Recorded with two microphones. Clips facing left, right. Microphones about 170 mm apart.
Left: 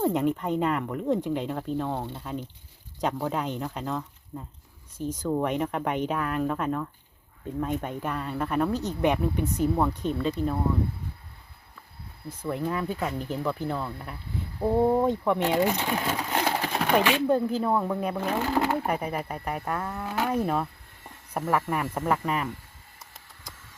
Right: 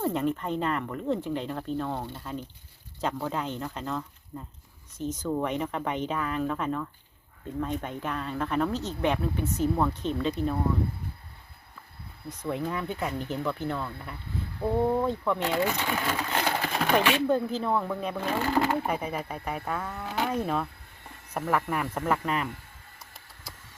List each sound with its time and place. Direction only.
0.0 s speech: 10° left (ahead or behind)
2.0 s speech: 25° left (ahead or behind)
3.0 s speech: 10° left (ahead or behind)
12.4 s speech: centre (ahead or behind)